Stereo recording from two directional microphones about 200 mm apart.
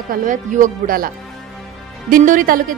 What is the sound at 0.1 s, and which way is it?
A woman's voice, 40° right (ahead or behind).